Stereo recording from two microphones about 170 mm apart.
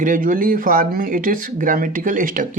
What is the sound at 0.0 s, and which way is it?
Speech, 50° right (ahead or behind).